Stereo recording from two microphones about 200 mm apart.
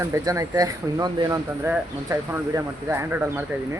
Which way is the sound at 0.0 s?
15° right (ahead or behind).